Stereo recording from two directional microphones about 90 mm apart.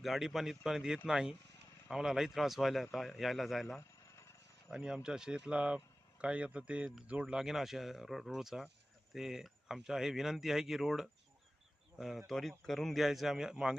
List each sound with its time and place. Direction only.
0.0 s speech: 5° right (ahead or behind)
3.8 s a sound: 30° left (ahead or behind)
4.7 s speech: 10° right (ahead or behind)
7.3 s speech: 5° right (ahead or behind)